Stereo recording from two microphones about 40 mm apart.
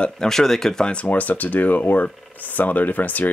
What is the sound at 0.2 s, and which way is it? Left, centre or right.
Speech, centre.